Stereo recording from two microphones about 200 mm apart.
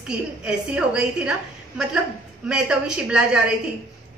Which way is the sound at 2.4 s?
5° right (ahead or behind).